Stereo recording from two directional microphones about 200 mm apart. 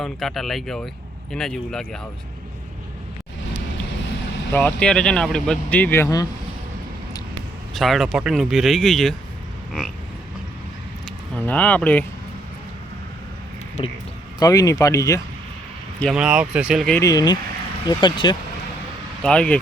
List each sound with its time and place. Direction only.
0.0 s speech: centre (ahead or behind)
4.5 s speech: 5° left (ahead or behind)
7.7 s speech: centre (ahead or behind)
11.3 s speech: 10° left (ahead or behind)
13.8 s speech: 30° left (ahead or behind)
14.3 s speech: 15° left (ahead or behind)
16.0 s speech: centre (ahead or behind)
17.0 s speech: 20° left (ahead or behind)
19.2 s speech: 5° left (ahead or behind)